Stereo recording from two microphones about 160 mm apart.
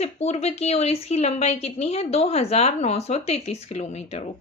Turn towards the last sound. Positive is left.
turn(degrees=40)  # may be behind; listen again after turning